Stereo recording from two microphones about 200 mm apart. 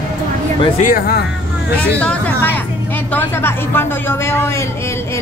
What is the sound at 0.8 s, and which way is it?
Speech, 45° left (ahead or behind).